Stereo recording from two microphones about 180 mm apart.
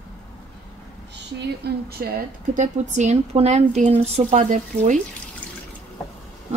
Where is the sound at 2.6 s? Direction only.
40° right (ahead or behind).